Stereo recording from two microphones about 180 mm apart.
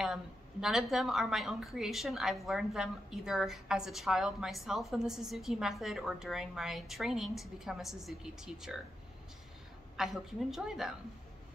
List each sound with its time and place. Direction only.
0.0 s a woman's voice: 5° right (ahead or behind)
9.9 s a woman's voice: 5° right (ahead or behind)